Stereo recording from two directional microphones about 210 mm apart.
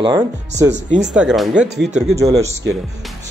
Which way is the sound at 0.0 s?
20° right (ahead or behind).